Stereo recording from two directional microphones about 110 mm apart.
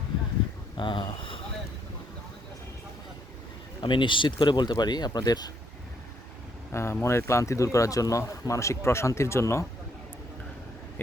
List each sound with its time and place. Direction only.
0.8 s speech: 45° left (ahead or behind)
3.8 s speech: 45° left (ahead or behind)
6.7 s speech: 25° left (ahead or behind)